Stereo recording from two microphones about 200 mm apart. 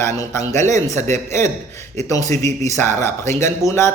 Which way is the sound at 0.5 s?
35° right (ahead or behind).